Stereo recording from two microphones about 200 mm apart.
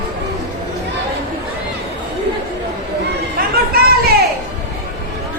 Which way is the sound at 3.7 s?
50° right (ahead or behind).